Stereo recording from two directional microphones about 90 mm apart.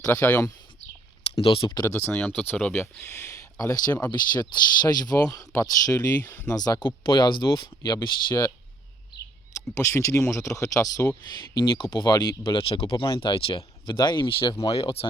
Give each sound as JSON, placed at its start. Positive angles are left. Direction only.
{"t": 0.1, "sound": "speech", "side_deg": 20}
{"t": 1.2, "sound": "speech", "side_deg": 90}
{"t": 2.0, "sound": "speech", "side_deg": 15}
{"t": 2.8, "sound": "speech", "side_deg": 30}
{"t": 6.7, "sound": "speech", "side_deg": 55}
{"t": 7.8, "sound": "speech", "side_deg": 45}
{"t": 9.7, "sound": "speech", "side_deg": 35}
{"t": 11.3, "sound": "speech", "side_deg": 60}
{"t": 12.5, "sound": "speech", "side_deg": 75}
{"t": 13.8, "sound": "speech", "side_deg": 55}
{"t": 14.3, "sound": "speech", "side_deg": 85}